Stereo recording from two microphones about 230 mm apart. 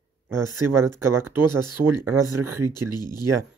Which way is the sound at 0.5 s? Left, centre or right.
Right.